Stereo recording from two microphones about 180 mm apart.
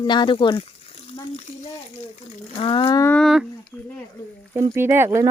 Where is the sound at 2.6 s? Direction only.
30° left (ahead or behind).